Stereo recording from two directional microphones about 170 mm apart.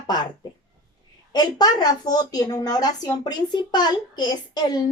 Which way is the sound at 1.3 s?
25° left (ahead or behind).